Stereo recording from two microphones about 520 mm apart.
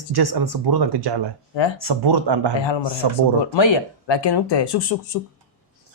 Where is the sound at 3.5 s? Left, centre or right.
Left.